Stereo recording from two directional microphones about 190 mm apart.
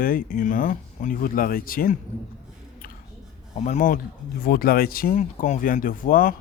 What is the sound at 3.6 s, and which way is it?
Speech, 40° left (ahead or behind).